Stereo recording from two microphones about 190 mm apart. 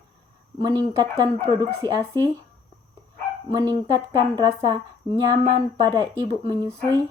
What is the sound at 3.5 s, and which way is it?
Speech, 20° right (ahead or behind).